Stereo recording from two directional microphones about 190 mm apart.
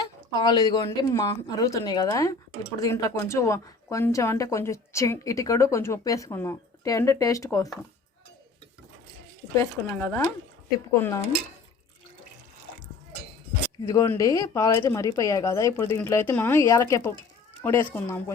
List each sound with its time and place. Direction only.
0.3 s a woman's voice: 20° left (ahead or behind)
9.6 s a woman's voice: 10° left (ahead or behind)
13.8 s a woman's voice: 15° left (ahead or behind)